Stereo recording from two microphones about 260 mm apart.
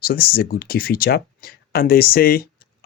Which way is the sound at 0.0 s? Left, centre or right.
Left.